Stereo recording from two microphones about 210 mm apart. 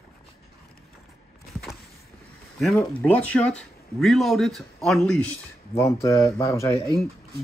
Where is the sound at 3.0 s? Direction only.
5° left (ahead or behind).